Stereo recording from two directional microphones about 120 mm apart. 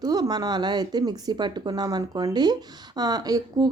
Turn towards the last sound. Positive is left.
turn(degrees=-35)  # may be behind; listen again after turning